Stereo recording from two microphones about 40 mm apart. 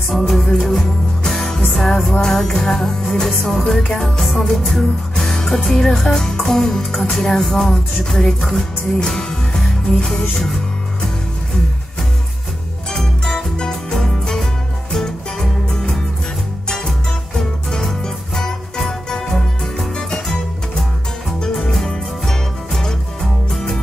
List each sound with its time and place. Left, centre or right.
0.2 s music: centre
1.6 s speech: centre
3.3 s music: centre
5.7 s speech: centre
9.2 s music: centre
13.6 s music: centre
13.9 s music: centre
21.4 s music: centre